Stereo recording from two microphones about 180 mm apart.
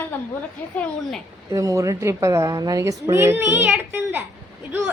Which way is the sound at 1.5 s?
20° right (ahead or behind).